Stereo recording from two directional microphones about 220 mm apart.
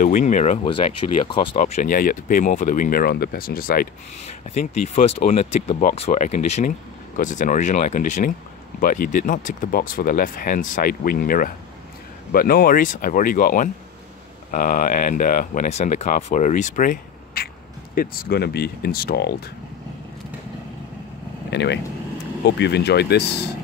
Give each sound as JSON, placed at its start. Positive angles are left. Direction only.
{"t": 0.0, "sound": "speech", "side_deg": 35}
{"t": 1.8, "sound": "speech", "side_deg": 40}
{"t": 21.5, "sound": "speech", "side_deg": 50}